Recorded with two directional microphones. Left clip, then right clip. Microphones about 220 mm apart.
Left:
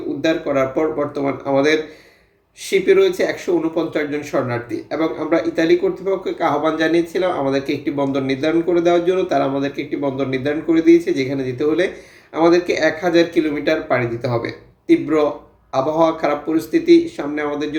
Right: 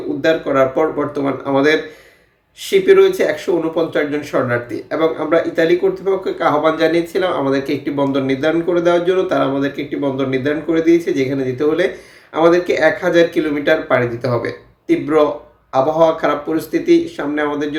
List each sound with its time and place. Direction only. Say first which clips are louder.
0.2 s speech: right 4 dB; 5° right (ahead or behind)